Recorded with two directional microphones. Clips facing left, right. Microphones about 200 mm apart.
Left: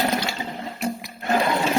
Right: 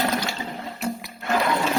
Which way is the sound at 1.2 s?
30° left (ahead or behind).